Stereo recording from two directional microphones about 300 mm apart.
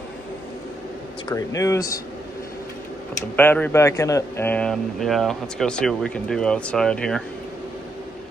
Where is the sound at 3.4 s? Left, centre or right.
Centre.